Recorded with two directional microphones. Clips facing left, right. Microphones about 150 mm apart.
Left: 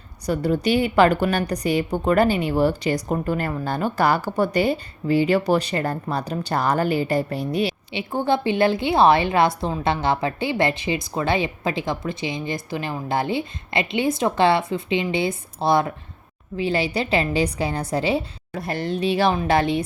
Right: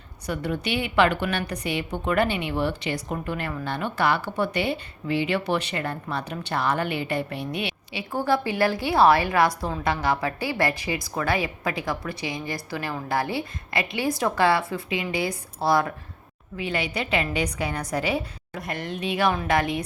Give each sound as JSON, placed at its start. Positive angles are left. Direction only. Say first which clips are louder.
{"t": 0.3, "sound": "a woman's voice", "louder": "left 7 dB", "side_deg": 35}
{"t": 8.1, "sound": "a woman's voice", "louder": "left 3 dB", "side_deg": 20}
{"t": 16.6, "sound": "a woman's voice", "louder": "left 5 dB", "side_deg": 30}